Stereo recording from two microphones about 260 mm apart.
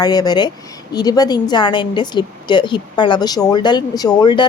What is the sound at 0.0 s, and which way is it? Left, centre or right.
A woman's voice, centre.